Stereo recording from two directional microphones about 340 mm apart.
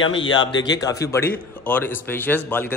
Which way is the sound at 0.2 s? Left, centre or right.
Centre.